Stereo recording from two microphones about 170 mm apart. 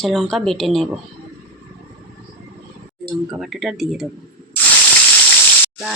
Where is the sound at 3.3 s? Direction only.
Centre (ahead or behind).